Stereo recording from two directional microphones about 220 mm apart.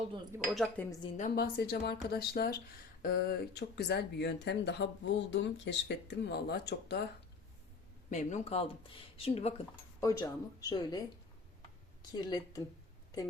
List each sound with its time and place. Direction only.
0.3 s cutlery: centre (ahead or behind)
1.1 s speech: 40° left (ahead or behind)
8.1 s speech: 30° left (ahead or behind)
10.0 s speech: 15° left (ahead or behind)
12.1 s speech: 20° left (ahead or behind)